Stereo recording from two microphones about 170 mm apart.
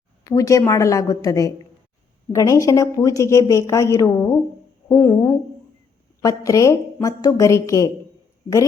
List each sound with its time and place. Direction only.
0.3 s a woman's voice: 20° left (ahead or behind)